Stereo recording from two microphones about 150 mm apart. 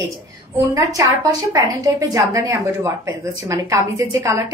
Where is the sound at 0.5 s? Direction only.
20° right (ahead or behind).